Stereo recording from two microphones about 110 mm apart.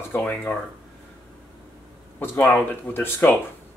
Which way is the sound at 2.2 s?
20° left (ahead or behind).